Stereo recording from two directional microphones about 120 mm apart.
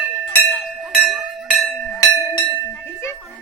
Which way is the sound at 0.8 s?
Centre (ahead or behind).